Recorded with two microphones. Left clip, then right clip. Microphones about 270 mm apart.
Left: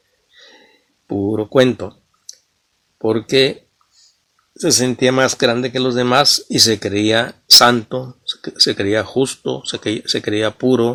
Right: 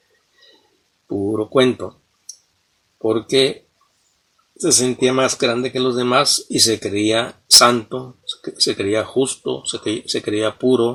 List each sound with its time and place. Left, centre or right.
1.0 s speech: left
3.0 s speech: left
4.5 s speech: left